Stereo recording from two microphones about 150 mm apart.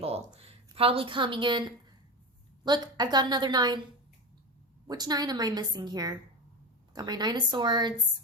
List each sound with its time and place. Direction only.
0.3 s a woman's voice: 40° right (ahead or behind)
4.9 s a woman's voice: 25° right (ahead or behind)